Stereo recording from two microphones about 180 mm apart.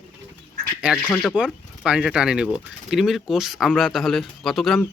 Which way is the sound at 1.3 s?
5° right (ahead or behind).